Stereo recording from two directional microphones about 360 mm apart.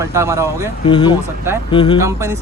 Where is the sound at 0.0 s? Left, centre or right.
Centre.